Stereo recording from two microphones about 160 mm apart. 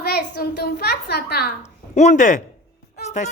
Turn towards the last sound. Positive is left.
turn(degrees=50)  # may be behind; listen again after turning